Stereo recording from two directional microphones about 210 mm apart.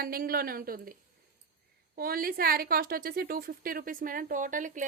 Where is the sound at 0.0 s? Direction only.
45° right (ahead or behind).